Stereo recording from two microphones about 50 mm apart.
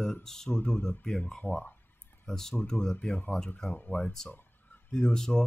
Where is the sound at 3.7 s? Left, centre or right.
Left.